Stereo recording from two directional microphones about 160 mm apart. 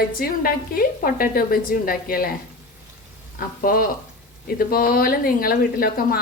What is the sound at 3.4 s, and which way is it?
A woman's voice, 65° left (ahead or behind).